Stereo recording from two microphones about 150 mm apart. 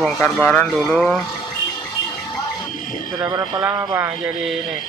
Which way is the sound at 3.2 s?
25° right (ahead or behind).